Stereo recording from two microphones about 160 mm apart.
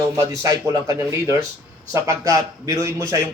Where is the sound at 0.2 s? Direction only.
20° right (ahead or behind).